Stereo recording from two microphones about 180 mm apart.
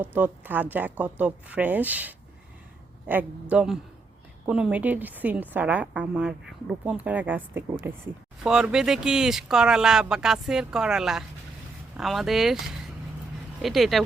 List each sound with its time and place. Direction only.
0.0 s a woman's voice: 10° right (ahead or behind)